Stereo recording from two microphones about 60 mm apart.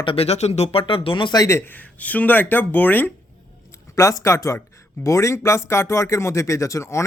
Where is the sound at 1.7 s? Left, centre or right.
Left.